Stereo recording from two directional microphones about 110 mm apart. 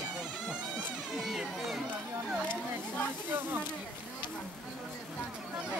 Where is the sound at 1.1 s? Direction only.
5° right (ahead or behind).